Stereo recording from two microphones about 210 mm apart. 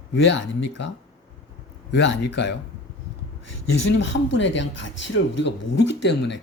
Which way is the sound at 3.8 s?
60° left (ahead or behind).